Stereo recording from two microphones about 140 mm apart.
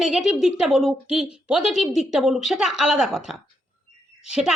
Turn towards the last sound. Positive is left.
turn(degrees=-5)  # may be behind; listen again after turning